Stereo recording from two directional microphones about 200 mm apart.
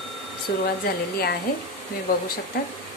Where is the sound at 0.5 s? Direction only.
55° left (ahead or behind).